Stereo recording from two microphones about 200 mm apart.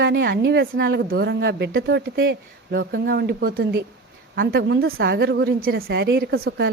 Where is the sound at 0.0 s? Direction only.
60° right (ahead or behind).